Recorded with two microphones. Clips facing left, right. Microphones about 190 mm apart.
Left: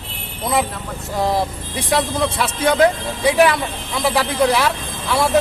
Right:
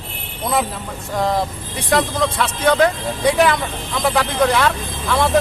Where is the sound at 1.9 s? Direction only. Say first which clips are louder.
Right 1 dB; 10° left (ahead or behind).